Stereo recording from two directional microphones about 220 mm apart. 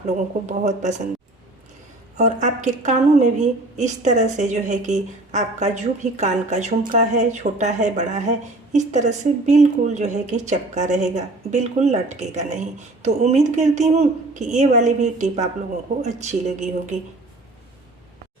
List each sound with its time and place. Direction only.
0.4 s a woman's voice: 30° right (ahead or behind)
2.1 s a woman's voice: 30° right (ahead or behind)